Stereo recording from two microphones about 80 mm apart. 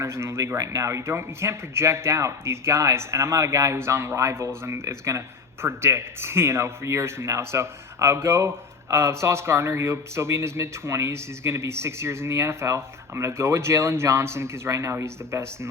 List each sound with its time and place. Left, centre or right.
0.0 s speech: right